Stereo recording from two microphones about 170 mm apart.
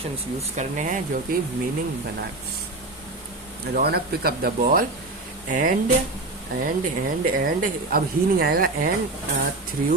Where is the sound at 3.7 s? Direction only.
65° right (ahead or behind).